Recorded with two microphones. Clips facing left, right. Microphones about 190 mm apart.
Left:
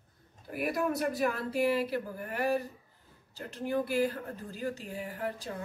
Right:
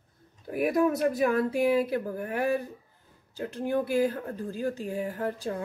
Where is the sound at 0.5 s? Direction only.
50° right (ahead or behind).